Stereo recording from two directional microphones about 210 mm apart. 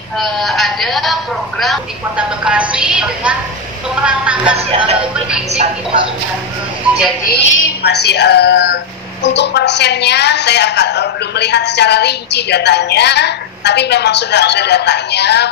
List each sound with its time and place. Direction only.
0.2 s a woman's voice: centre (ahead or behind)
4.6 s speech: 30° right (ahead or behind)
7.2 s a woman's voice: 60° left (ahead or behind)